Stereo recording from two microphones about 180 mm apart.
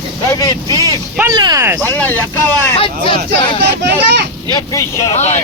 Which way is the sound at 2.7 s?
30° left (ahead or behind).